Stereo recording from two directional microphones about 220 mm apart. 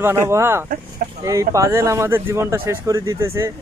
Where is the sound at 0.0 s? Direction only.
10° right (ahead or behind).